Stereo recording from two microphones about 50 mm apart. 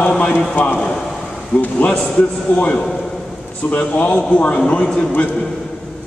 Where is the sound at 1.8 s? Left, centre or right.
Centre.